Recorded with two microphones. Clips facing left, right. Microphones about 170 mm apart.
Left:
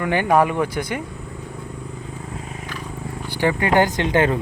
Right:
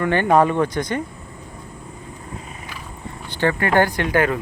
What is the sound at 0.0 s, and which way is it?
Speech, 10° left (ahead or behind).